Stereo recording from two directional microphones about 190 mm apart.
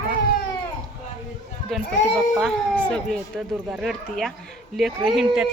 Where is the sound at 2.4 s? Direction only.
5° left (ahead or behind).